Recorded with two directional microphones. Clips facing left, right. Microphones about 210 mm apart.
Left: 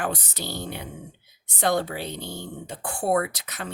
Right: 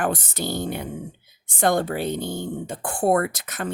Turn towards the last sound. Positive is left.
turn(degrees=-50)  # may be behind; listen again after turning